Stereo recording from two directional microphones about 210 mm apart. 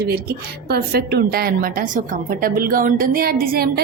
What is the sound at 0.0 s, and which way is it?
A woman's voice, 50° right (ahead or behind).